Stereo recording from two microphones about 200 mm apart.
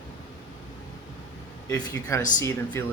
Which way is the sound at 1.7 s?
20° left (ahead or behind).